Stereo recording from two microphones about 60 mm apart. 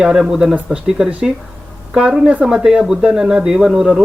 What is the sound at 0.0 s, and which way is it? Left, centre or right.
A woman's voice, centre.